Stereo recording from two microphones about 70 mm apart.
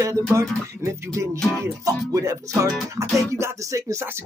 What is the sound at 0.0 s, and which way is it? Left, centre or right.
Music, right.